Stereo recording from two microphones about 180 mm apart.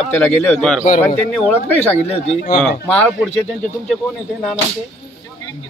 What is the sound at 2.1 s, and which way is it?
Speech, 40° left (ahead or behind).